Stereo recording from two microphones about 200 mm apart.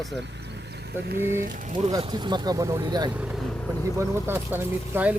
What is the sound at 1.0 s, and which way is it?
Speech, 45° right (ahead or behind).